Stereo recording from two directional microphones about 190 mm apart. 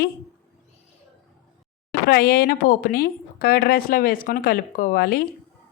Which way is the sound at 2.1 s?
55° left (ahead or behind).